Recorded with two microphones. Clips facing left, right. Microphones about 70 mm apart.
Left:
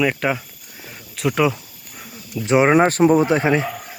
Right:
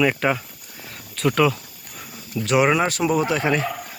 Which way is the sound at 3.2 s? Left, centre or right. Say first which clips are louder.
Left 4 dB; left.